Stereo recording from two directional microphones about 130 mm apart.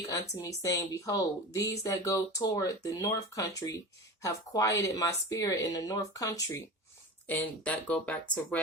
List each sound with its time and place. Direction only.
0.1 s speech: 25° left (ahead or behind)
7.3 s speech: 10° left (ahead or behind)